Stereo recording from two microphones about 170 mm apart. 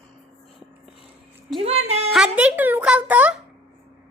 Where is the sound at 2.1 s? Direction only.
5° right (ahead or behind).